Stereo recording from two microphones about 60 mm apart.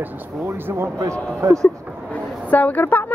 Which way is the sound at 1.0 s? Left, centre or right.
Right.